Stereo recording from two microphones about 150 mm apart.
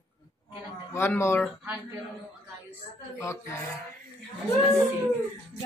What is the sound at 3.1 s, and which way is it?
Speech, 20° left (ahead or behind).